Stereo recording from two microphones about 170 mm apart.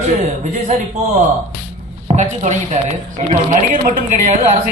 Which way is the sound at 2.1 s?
45° right (ahead or behind).